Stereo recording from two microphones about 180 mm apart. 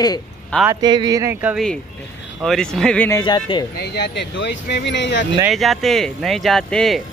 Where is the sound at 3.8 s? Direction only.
70° left (ahead or behind).